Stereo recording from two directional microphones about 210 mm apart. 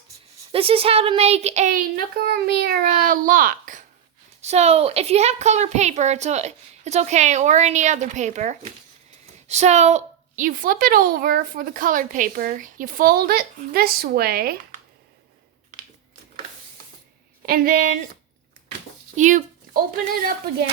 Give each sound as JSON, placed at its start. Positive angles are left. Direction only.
{"t": 0.5, "sound": "a woman's voice", "side_deg": -25}
{"t": 17.4, "sound": "a woman's voice", "side_deg": -45}
{"t": 19.1, "sound": "dog", "side_deg": -35}